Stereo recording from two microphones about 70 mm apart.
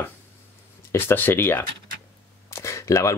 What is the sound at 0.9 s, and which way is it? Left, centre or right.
Speech, left.